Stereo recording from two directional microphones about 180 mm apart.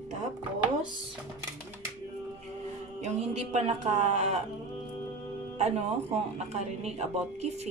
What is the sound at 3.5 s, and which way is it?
Speech, 40° right (ahead or behind).